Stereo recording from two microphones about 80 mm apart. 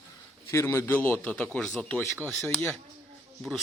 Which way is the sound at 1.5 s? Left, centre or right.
Centre.